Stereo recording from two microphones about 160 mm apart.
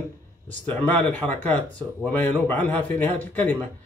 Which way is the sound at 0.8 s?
10° left (ahead or behind).